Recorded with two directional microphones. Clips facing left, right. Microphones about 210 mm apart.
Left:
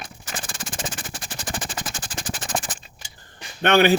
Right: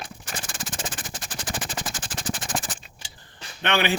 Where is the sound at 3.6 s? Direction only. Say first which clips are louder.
Left 7 dB; 45° left (ahead or behind).